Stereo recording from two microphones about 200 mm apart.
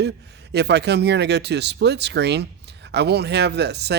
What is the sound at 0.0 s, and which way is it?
Speech, 60° right (ahead or behind).